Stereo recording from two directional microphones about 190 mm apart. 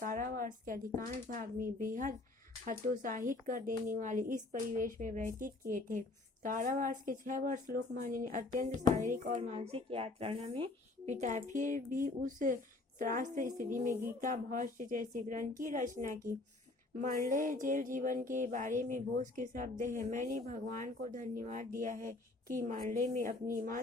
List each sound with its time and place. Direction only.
0.0 s a woman's voice: 45° right (ahead or behind)
0.9 s mantra: 45° right (ahead or behind)
9.0 s speech: 40° right (ahead or behind)
9.6 s speech: 30° right (ahead or behind)
13.0 s mantra: 45° right (ahead or behind)